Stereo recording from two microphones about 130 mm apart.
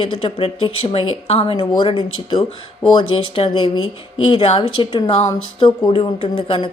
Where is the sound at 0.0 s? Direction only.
45° left (ahead or behind).